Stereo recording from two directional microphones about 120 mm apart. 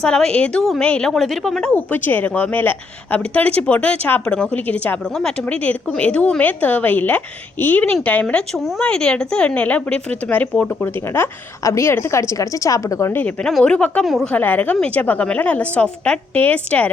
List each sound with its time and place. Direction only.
0.0 s a woman's voice: 5° left (ahead or behind)
1.7 s a woman's voice: 15° left (ahead or behind)
13.5 s a woman's voice: 5° left (ahead or behind)
14.3 s a woman's voice: 15° left (ahead or behind)